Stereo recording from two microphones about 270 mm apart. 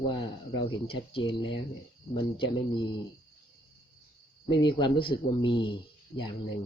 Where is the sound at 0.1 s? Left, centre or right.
Centre.